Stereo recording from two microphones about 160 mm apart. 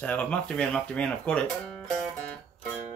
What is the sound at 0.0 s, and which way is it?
Speech, 10° left (ahead or behind).